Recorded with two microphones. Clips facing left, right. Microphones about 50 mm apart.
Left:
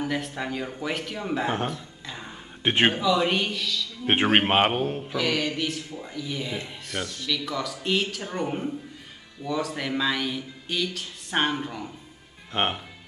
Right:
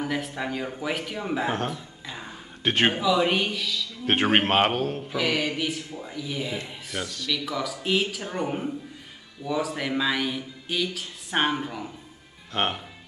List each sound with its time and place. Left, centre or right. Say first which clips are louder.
0.0 s a man's voice: even; centre
1.7 s a sound: even; centre
2.6 s a man's voice: left 1 dB; centre
2.9 s a man's voice: even; centre
4.0 s a man's voice: left 1 dB; centre
5.1 s a man's voice: right 1 dB; centre
12.5 s speech: left 1 dB; left